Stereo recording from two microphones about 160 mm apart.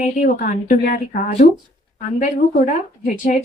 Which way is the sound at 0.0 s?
55° left (ahead or behind).